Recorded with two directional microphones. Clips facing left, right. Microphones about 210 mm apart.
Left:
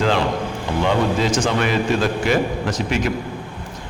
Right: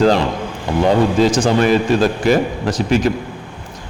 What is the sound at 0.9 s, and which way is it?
A man's voice, 35° right (ahead or behind).